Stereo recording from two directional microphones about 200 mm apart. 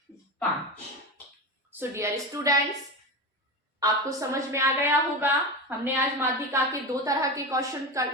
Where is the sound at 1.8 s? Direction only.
15° right (ahead or behind).